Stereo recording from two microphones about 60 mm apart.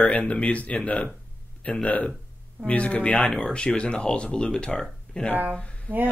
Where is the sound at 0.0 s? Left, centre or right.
Left.